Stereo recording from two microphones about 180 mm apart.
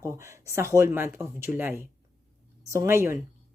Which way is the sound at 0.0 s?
15° right (ahead or behind).